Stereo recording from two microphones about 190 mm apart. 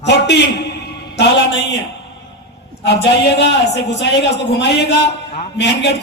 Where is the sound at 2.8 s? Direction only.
65° left (ahead or behind).